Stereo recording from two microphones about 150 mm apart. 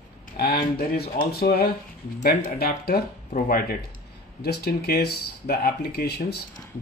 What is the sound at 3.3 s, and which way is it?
Speech, 80° left.